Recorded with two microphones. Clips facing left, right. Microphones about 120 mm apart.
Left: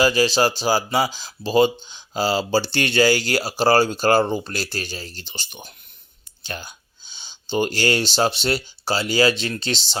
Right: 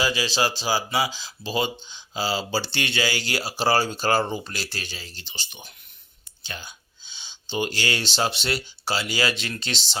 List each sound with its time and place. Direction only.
0.0 s speech: 45° left (ahead or behind)